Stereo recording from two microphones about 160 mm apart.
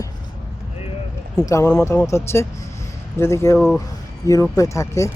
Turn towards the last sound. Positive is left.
turn(degrees=20)  # may be behind; listen again after turning